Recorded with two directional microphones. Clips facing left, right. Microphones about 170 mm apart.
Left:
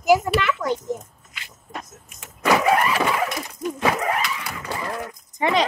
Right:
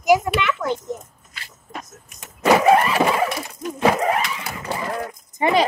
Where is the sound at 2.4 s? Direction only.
25° right (ahead or behind).